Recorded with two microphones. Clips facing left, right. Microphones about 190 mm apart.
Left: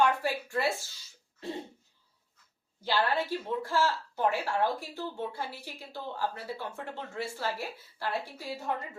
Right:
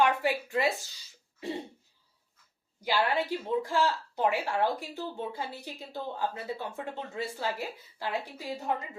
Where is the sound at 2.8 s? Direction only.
10° right (ahead or behind).